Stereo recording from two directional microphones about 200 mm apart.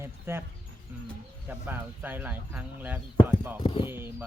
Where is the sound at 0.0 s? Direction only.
10° right (ahead or behind).